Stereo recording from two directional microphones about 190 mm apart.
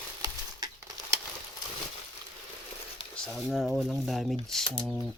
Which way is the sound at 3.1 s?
Centre (ahead or behind).